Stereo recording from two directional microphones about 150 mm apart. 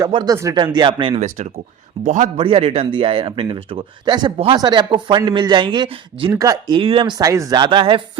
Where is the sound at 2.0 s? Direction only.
60° right (ahead or behind).